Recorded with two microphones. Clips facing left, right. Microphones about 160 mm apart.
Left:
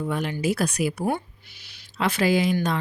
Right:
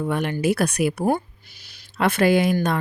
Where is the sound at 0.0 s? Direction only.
60° right (ahead or behind).